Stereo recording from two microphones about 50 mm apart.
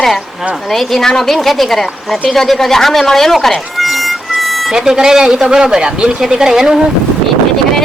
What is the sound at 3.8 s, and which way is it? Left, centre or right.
Harmonica, centre.